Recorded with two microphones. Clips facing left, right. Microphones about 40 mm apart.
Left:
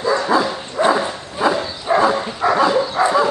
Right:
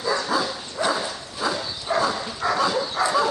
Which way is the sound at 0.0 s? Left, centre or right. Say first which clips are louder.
Left 7 dB; left.